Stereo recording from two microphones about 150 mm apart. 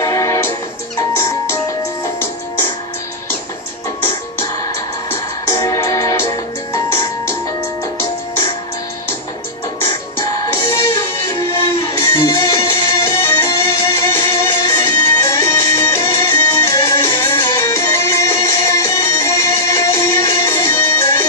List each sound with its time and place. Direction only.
0.0 s music: 20° left (ahead or behind)
5.1 s music: 20° left (ahead or behind)
12.0 s music: 20° left (ahead or behind)